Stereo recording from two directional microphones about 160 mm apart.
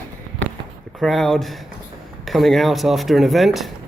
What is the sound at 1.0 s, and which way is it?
Speech, centre (ahead or behind).